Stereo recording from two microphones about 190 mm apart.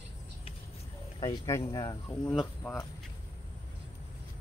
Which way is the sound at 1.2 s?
20° left (ahead or behind).